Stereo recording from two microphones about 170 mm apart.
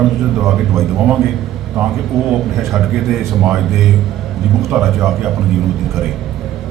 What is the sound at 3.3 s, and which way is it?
A man's voice, centre (ahead or behind).